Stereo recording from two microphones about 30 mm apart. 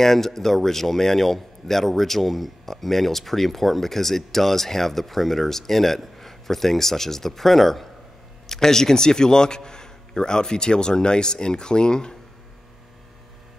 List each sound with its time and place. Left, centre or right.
0.0 s a man's voice: centre